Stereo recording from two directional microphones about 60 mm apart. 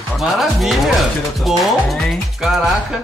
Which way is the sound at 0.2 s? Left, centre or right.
Centre.